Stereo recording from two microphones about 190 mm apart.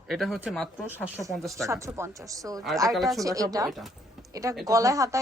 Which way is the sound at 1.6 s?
15° right (ahead or behind).